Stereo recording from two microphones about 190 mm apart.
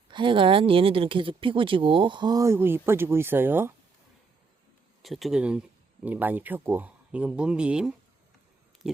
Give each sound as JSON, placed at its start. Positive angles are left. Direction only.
{"t": 0.1, "sound": "speech", "side_deg": -25}
{"t": 5.0, "sound": "speech", "side_deg": 0}